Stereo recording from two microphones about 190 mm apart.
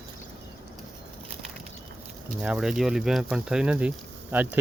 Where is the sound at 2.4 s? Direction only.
5° right (ahead or behind).